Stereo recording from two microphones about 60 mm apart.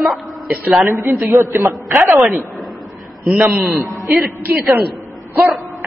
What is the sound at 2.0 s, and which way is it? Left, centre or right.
Speech, right.